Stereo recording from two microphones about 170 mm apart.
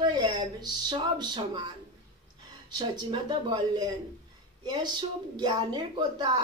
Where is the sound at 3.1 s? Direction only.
25° right (ahead or behind).